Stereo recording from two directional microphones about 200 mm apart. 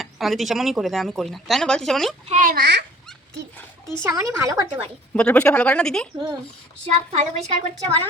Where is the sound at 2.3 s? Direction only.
45° right (ahead or behind).